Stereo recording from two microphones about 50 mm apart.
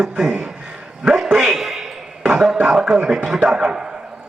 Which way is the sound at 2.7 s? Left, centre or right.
Centre.